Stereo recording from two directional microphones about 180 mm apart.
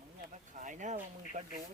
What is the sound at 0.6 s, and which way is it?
Speech, 45° right (ahead or behind).